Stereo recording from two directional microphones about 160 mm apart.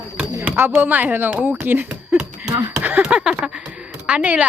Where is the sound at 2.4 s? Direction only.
20° right (ahead or behind).